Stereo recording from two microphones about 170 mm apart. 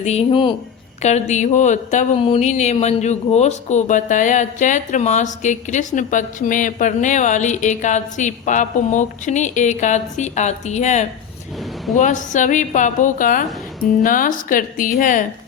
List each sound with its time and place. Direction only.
0.0 s speech: 40° left (ahead or behind)
1.0 s speech: 45° left (ahead or behind)